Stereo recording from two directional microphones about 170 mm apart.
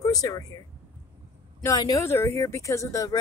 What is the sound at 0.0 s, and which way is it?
Speech, 20° left (ahead or behind).